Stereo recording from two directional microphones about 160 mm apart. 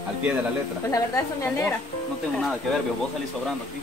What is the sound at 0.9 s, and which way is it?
Speech, 15° left (ahead or behind).